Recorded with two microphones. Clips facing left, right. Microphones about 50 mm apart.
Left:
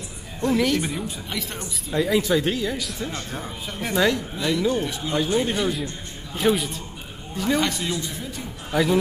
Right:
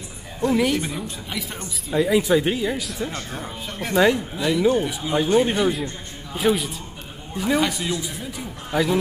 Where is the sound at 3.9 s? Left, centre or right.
Centre.